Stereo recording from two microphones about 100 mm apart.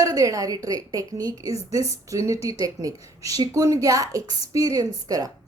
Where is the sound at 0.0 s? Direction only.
35° right (ahead or behind).